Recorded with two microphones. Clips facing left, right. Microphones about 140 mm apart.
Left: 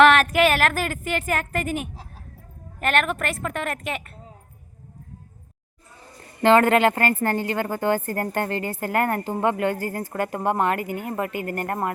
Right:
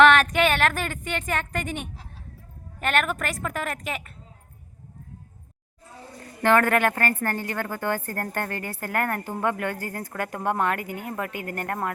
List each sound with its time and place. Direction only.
0.0 s a woman's voice: centre (ahead or behind)
6.4 s a woman's voice: 15° left (ahead or behind)
10.8 s speech: 50° left (ahead or behind)
11.4 s a woman's voice: 5° left (ahead or behind)